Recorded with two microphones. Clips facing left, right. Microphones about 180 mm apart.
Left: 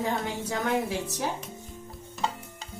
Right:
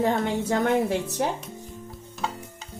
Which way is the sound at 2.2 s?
Centre (ahead or behind).